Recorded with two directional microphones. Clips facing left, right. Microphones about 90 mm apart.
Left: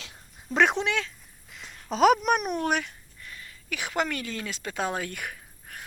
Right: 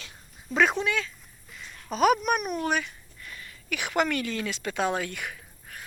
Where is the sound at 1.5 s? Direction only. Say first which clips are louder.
Left 2 dB; 85° left.